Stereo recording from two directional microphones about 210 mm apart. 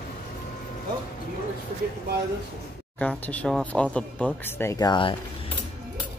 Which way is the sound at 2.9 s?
5° left (ahead or behind).